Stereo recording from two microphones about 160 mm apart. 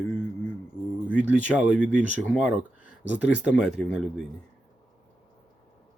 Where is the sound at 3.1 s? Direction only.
5° right (ahead or behind).